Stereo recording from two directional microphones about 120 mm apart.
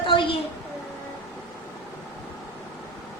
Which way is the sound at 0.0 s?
45° left (ahead or behind).